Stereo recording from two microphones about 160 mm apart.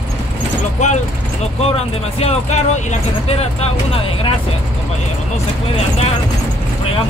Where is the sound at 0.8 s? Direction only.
45° left (ahead or behind).